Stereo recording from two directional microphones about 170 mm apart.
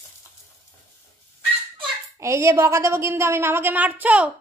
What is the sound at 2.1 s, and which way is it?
A woman's voice, 15° right (ahead or behind).